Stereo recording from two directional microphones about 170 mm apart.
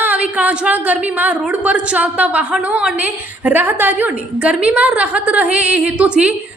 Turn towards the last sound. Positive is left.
turn(degrees=-5)  # may be behind; listen again after turning